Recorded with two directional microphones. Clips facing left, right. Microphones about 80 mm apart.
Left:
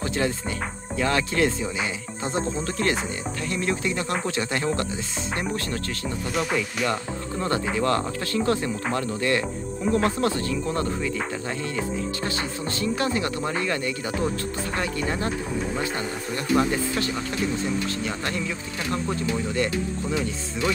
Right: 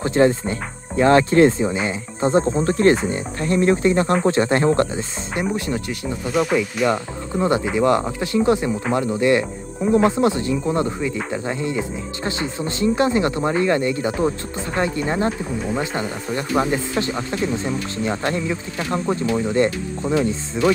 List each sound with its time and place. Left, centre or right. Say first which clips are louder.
0.0 s speech: right 9 dB; right
5.3 s speech: right 6 dB; centre
6.3 s speech: right 7 dB; centre
6.9 s speech: right 5 dB; centre